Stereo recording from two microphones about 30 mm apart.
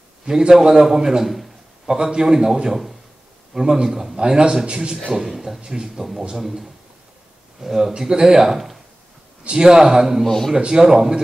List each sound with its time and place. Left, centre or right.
0.5 s a man's voice: right
5.1 s a man's voice: centre
6.3 s a man's voice: centre
9.6 s a man's voice: right
10.2 s speech: centre
10.8 s a man's voice: centre